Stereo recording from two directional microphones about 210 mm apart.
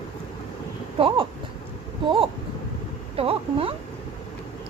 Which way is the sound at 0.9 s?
25° right (ahead or behind).